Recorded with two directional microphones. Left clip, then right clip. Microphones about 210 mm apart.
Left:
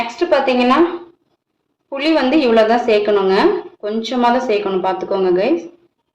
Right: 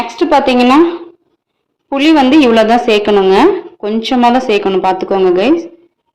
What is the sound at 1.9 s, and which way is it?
A woman's voice, 40° right (ahead or behind).